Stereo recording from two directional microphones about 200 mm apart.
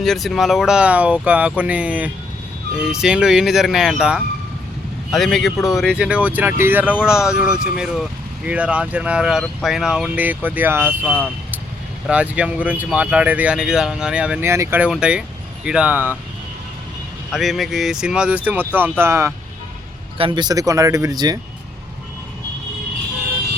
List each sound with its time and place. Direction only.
0.0 s speech: centre (ahead or behind)
17.3 s speech: centre (ahead or behind)
20.1 s speech: 25° right (ahead or behind)